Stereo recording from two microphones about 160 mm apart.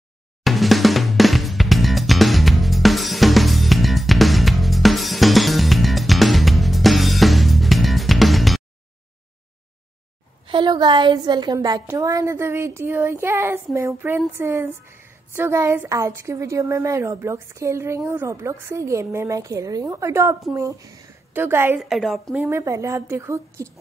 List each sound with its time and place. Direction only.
0.4 s music: centre (ahead or behind)
10.5 s a woman's voice: 30° right (ahead or behind)
21.7 s a woman's voice: centre (ahead or behind)
22.4 s a woman's voice: 15° right (ahead or behind)